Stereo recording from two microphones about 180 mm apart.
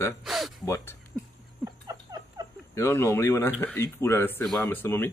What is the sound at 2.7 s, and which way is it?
Speech, 15° left (ahead or behind).